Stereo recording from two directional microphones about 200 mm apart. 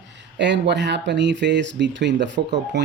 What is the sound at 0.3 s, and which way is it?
Speech, 60° right (ahead or behind).